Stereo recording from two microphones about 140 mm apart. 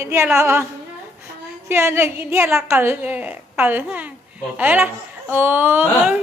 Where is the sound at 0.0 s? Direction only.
20° right (ahead or behind).